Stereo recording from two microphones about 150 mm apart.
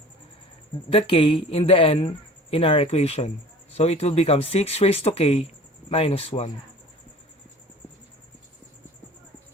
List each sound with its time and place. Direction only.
0.9 s speech: 40° left (ahead or behind)